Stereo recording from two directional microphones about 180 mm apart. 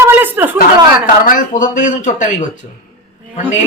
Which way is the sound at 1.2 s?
50° left (ahead or behind).